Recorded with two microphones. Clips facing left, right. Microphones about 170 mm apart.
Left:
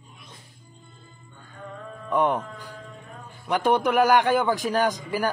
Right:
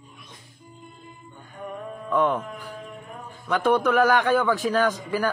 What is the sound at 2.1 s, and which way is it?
Speech, 10° left (ahead or behind).